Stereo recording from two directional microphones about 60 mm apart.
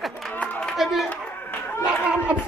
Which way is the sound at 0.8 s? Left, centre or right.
Centre.